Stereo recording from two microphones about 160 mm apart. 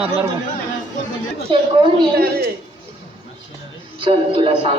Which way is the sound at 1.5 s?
30° right (ahead or behind).